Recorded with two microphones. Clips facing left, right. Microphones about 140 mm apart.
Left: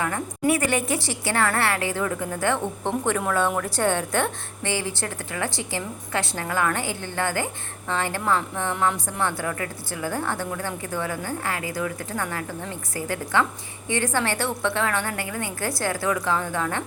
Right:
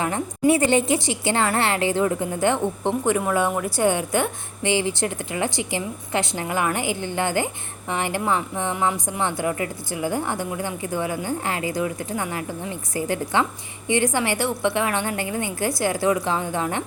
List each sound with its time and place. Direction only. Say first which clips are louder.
0.0 s a woman's voice: right 3 dB; 25° right (ahead or behind)